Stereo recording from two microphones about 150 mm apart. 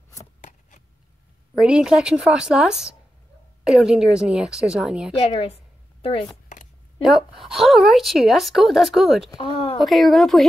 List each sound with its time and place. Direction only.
0.4 s a sound: 55° left (ahead or behind)
1.6 s speech: 5° right (ahead or behind)
5.1 s a woman's voice: 40° left (ahead or behind)
7.0 s speech: 5° right (ahead or behind)
9.4 s a woman's voice: 40° left (ahead or behind)
9.8 s speech: centre (ahead or behind)